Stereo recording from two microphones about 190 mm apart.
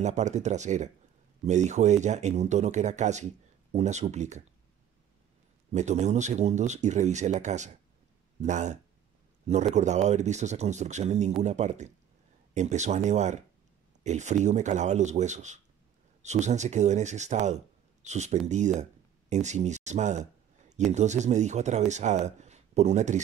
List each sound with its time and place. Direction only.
0.0 s speech: 40° right (ahead or behind)
5.7 s speech: 35° right (ahead or behind)
9.8 s speech: 35° right (ahead or behind)